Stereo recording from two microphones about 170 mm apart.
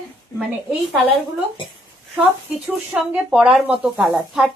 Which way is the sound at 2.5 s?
5° right (ahead or behind).